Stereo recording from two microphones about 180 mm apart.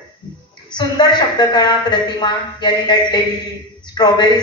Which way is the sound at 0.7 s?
25° left (ahead or behind).